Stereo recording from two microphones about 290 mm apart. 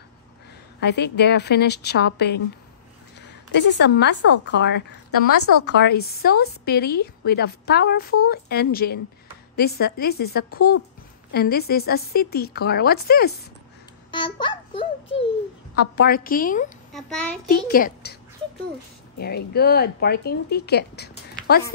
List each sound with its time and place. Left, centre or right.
0.7 s a woman's voice: left
5.3 s speech: left
5.8 s a woman's voice: left
14.1 s a child's voice: centre
15.7 s a woman's voice: left
16.9 s a child's voice: centre
17.5 s a woman's voice: left
19.1 s a woman's voice: left
21.1 s a sound: left